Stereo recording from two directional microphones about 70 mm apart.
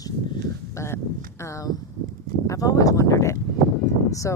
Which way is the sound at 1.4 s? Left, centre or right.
Left.